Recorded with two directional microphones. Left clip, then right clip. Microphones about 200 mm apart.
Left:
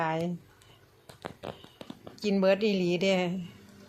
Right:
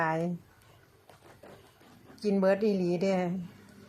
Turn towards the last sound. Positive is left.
turn(degrees=10)  # may be behind; listen again after turning